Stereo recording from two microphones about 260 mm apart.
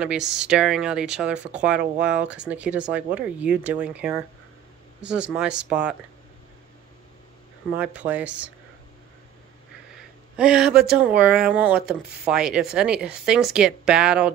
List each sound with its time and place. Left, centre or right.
0.0 s speech: centre
7.7 s speech: centre
10.3 s speech: centre